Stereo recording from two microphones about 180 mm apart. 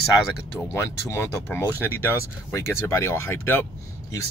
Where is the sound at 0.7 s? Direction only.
15° left (ahead or behind).